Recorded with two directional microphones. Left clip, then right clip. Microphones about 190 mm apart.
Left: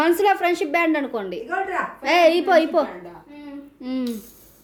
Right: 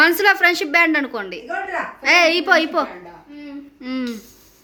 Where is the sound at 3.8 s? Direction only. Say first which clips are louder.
Right 1 dB; 10° left (ahead or behind).